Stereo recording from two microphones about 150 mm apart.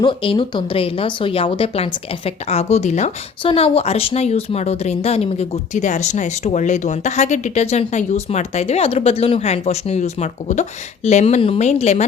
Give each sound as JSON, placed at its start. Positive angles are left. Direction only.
{"t": 0.0, "sound": "speech", "side_deg": 35}